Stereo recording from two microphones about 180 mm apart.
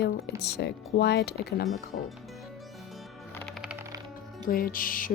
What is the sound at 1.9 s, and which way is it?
Speech, 50° left (ahead or behind).